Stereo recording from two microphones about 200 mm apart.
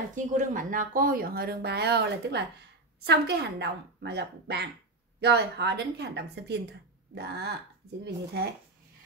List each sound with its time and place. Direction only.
0.1 s a woman's voice: 40° right (ahead or behind)